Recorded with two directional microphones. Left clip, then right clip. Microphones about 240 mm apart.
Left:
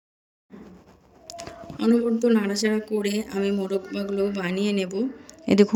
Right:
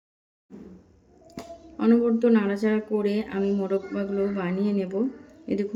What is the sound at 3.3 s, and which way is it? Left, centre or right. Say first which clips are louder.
A woman's voice: even; left.